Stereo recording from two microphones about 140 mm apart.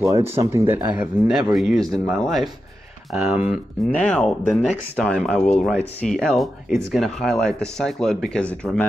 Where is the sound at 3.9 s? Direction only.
5° left (ahead or behind).